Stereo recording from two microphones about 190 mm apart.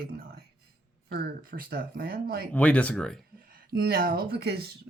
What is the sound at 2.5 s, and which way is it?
Speech, 5° left (ahead or behind).